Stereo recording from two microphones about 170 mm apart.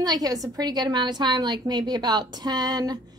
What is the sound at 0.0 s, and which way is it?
Speech, 20° right (ahead or behind).